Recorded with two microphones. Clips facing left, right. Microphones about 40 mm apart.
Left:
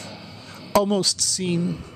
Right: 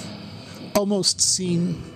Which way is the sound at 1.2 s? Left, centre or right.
Left.